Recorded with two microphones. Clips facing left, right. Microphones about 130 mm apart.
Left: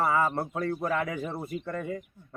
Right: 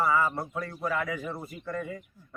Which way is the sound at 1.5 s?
50° left (ahead or behind).